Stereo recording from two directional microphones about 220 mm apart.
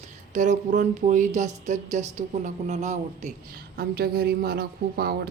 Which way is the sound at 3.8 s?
45° right (ahead or behind).